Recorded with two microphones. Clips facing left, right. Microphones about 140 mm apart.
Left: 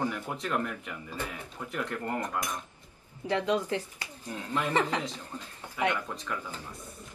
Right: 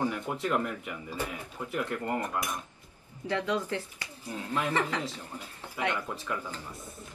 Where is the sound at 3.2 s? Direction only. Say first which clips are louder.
Left 2 dB; 15° left (ahead or behind).